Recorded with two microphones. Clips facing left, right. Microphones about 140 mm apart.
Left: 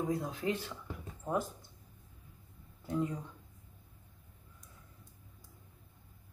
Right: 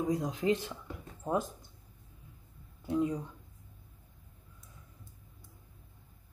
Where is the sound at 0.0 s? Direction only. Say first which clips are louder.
Right 3 dB; 15° right (ahead or behind).